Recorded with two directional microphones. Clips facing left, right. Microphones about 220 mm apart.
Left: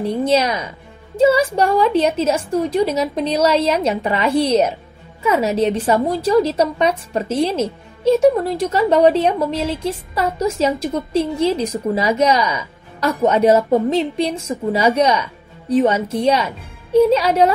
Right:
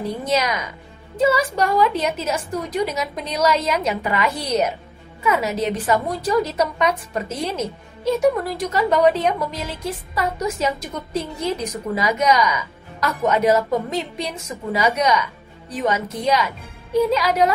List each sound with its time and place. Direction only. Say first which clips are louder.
0.2 s a woman's voice: left 5 dB; 30° left (ahead or behind)